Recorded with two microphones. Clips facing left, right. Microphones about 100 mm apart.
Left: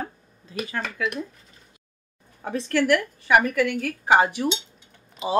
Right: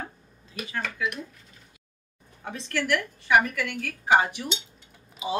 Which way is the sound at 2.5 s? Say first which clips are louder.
Left 6 dB; 45° left (ahead or behind).